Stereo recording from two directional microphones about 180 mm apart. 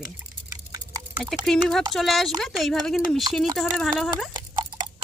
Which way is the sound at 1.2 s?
Centre (ahead or behind).